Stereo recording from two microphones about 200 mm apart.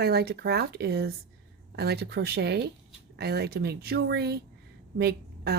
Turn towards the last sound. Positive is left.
turn(degrees=-55)  # may be behind; listen again after turning